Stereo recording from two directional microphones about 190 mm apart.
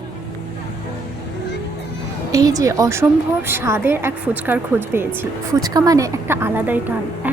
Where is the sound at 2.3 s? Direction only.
20° right (ahead or behind).